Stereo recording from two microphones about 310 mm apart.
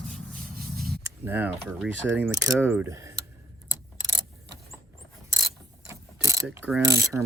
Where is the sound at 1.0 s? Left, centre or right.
Centre.